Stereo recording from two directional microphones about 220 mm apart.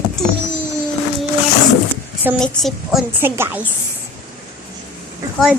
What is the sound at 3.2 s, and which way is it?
Speech, 10° right (ahead or behind).